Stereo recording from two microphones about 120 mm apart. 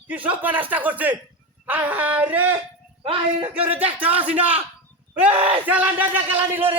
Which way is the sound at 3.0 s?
50° right (ahead or behind).